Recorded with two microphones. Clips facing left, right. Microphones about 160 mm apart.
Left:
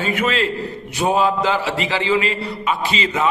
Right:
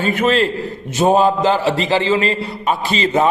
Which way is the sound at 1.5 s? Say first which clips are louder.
Right 5 dB; 30° right (ahead or behind).